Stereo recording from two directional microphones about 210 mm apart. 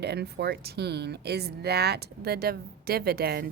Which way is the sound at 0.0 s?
50° right (ahead or behind).